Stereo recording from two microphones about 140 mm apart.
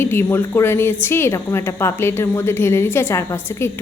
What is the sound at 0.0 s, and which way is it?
A woman's voice, 15° left (ahead or behind).